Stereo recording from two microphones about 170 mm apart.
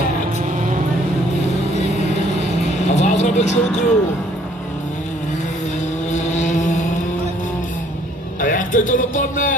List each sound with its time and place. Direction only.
2.4 s vehicle: 40° left (ahead or behind)
6.1 s vehicle: 45° left (ahead or behind)
8.4 s speech: 50° left (ahead or behind)